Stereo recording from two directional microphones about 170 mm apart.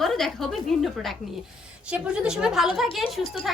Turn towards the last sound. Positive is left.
turn(degrees=0)  # may be behind; listen again after turning